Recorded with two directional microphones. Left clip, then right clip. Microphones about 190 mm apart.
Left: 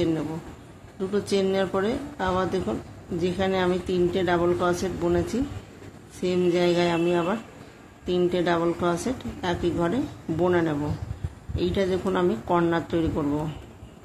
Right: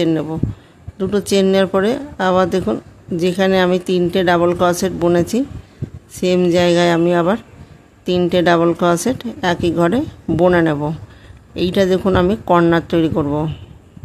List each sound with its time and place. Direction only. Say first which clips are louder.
0.0 s speech: right 9 dB; 60° right (ahead or behind)